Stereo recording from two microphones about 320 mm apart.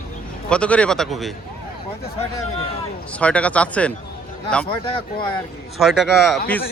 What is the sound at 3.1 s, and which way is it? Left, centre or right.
Speech, centre.